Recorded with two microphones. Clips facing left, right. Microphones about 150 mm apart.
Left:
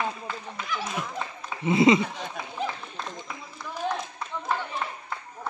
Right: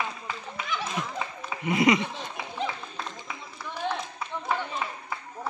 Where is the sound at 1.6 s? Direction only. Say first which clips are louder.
Left 3 dB; 25° left (ahead or behind).